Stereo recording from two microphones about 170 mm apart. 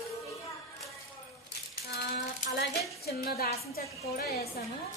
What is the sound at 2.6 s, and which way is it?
A woman's voice, 70° left (ahead or behind).